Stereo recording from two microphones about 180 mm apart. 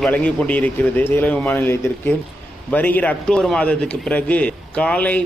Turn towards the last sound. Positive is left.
turn(degrees=10)  # may be behind; listen again after turning